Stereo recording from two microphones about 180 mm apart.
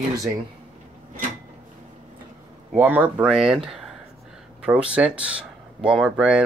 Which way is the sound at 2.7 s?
10° right (ahead or behind).